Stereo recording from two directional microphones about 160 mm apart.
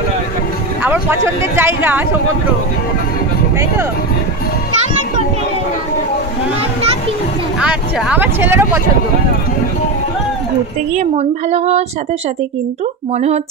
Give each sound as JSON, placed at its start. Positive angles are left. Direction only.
{"t": 0.8, "sound": "speech", "side_deg": -15}
{"t": 7.6, "sound": "speech", "side_deg": -10}
{"t": 11.0, "sound": "a woman's voice", "side_deg": -45}
{"t": 13.1, "sound": "a woman's voice", "side_deg": -45}